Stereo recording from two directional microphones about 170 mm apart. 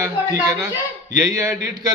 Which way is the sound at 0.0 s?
20° right (ahead or behind).